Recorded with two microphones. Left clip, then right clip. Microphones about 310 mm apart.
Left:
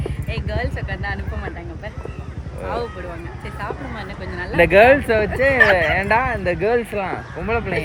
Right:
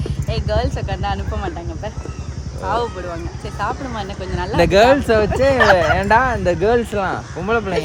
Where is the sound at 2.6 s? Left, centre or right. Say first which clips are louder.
Right 5 dB; centre.